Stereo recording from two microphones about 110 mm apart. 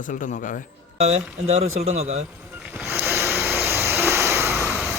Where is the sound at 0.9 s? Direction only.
80° right.